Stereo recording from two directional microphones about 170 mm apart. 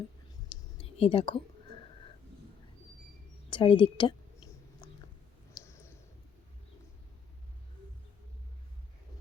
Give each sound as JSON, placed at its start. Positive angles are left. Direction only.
{"t": 0.8, "sound": "speech", "side_deg": 35}
{"t": 3.5, "sound": "a woman's voice", "side_deg": 30}
{"t": 4.8, "sound": "a sound", "side_deg": 25}
{"t": 5.6, "sound": "clicking", "side_deg": 20}